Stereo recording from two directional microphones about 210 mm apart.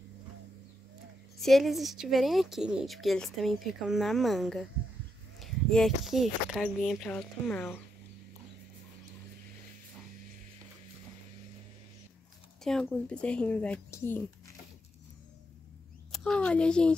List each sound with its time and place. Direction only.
1.4 s a woman's voice: centre (ahead or behind)
12.6 s a woman's voice: 5° left (ahead or behind)
16.1 s a child's voice: 5° left (ahead or behind)